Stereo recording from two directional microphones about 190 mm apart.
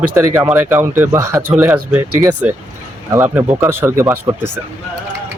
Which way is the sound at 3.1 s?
10° right (ahead or behind).